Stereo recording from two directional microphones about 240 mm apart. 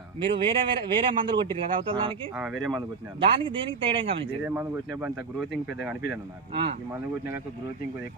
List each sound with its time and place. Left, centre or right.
0.2 s speech: right
2.3 s speech: centre
3.2 s speech: right
4.4 s speech: centre